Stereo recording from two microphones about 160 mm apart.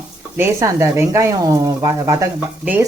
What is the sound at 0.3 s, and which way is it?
Speech, 15° right (ahead or behind).